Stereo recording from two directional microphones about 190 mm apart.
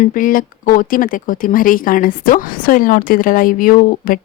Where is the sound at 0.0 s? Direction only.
45° left (ahead or behind).